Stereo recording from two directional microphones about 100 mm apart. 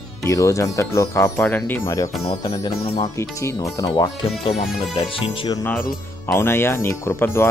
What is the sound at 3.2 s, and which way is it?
Speech, 30° left (ahead or behind).